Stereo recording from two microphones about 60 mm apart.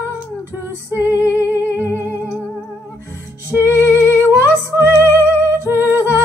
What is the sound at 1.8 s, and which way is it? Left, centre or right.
Music, right.